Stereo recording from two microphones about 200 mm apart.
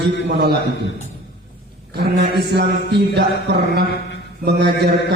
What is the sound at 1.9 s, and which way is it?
Mantra, 55° right (ahead or behind).